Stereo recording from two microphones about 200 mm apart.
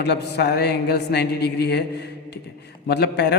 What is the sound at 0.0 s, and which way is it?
A man's voice, 55° left (ahead or behind).